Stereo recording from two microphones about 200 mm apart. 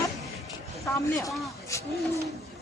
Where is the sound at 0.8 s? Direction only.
15° left (ahead or behind).